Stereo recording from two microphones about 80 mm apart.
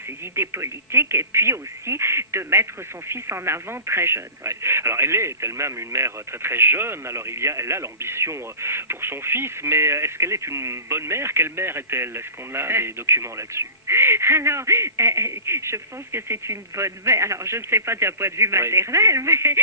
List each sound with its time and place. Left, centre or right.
0.3 s speech: right